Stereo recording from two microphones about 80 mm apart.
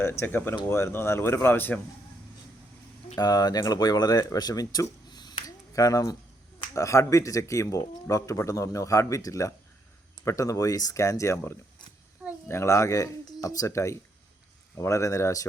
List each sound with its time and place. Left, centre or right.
0.0 s speech: left
3.2 s speech: left